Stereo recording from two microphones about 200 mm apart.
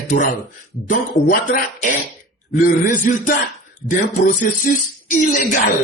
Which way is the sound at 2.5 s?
40° left (ahead or behind).